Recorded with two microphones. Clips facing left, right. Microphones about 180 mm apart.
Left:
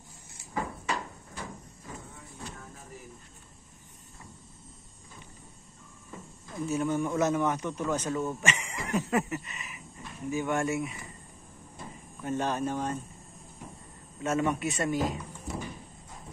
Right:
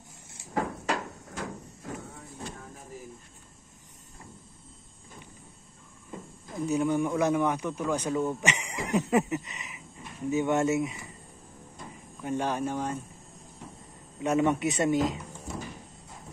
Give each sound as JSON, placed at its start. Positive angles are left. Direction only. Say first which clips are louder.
{"t": 0.6, "sound": "a sound", "louder": "right 3 dB", "side_deg": -80}
{"t": 6.5, "sound": "a man's voice", "louder": "right 3 dB", "side_deg": -15}
{"t": 12.2, "sound": "a man's voice", "louder": "right 1 dB", "side_deg": -10}
{"t": 14.2, "sound": "a man's voice", "louder": "right 3 dB", "side_deg": -20}